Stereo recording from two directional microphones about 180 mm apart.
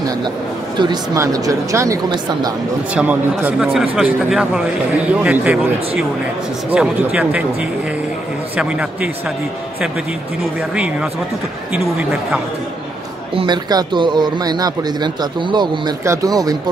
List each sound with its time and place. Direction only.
0.7 s speech: 20° right (ahead or behind)
2.9 s speech: 5° right (ahead or behind)
11.7 s speech: 5° right (ahead or behind)
13.4 s speech: 25° right (ahead or behind)